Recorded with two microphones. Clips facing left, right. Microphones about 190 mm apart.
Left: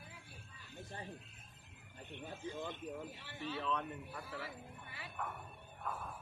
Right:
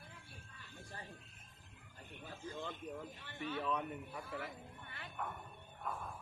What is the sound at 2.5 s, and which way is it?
Speech, 10° left (ahead or behind).